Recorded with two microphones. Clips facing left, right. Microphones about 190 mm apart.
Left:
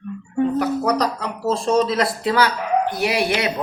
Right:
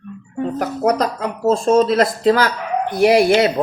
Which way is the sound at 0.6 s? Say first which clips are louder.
Right 2 dB; 50° right (ahead or behind).